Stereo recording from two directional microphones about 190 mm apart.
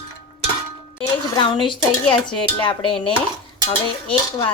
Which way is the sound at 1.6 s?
25° left (ahead or behind).